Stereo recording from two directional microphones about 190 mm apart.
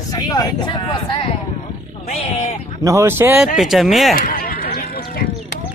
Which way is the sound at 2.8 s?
15° right (ahead or behind).